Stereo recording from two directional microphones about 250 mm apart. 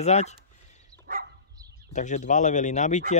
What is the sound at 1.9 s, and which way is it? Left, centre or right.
Speech, left.